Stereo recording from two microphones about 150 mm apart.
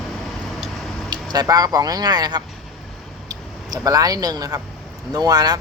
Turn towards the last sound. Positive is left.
turn(degrees=-25)  # may be behind; listen again after turning